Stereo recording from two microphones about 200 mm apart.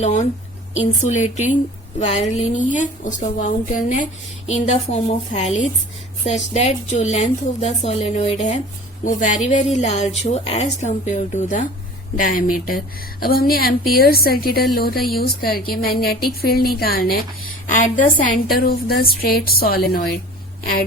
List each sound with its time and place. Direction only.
0.0 s a woman's voice: 35° left (ahead or behind)